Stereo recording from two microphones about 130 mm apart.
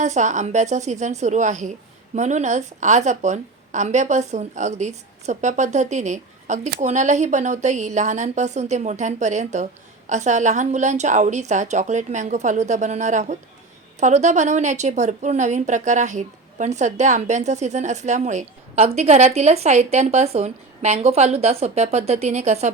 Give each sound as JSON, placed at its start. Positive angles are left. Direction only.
{"t": 0.0, "sound": "a woman's voice", "side_deg": -65}